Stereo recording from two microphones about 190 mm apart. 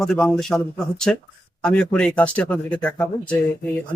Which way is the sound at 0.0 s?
Centre (ahead or behind).